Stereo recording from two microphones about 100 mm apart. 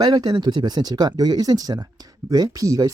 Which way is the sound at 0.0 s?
45° right (ahead or behind).